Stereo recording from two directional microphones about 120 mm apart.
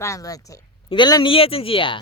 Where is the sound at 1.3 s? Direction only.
50° left (ahead or behind).